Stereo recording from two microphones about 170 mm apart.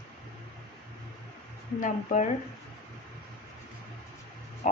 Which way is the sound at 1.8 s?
45° left (ahead or behind).